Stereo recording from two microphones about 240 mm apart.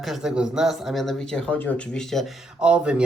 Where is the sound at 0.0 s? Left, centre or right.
Centre.